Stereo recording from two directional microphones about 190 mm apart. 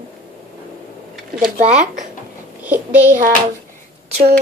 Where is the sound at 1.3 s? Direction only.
45° right (ahead or behind).